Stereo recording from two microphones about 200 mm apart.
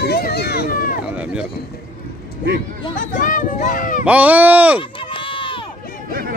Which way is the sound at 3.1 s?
40° left (ahead or behind).